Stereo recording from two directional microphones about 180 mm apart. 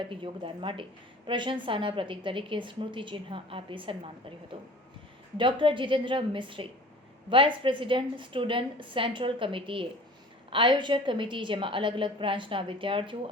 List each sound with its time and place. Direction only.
0.0 s a woman's voice: 30° right (ahead or behind)
5.4 s a woman's voice: 30° right (ahead or behind)